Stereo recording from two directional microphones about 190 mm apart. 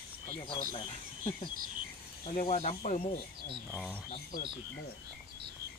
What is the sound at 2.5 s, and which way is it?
Speech, 35° left (ahead or behind).